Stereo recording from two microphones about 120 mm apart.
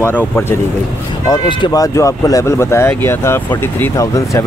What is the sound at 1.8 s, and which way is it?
Speech, 25° left (ahead or behind).